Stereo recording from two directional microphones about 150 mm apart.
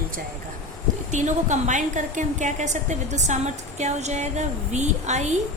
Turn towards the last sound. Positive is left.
turn(degrees=-50)  # may be behind; listen again after turning